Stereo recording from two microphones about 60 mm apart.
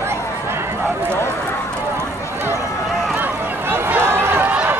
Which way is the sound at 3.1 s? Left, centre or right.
Right.